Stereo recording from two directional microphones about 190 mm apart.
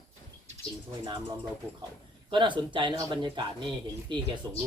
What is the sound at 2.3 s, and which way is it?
Speech, 25° right (ahead or behind).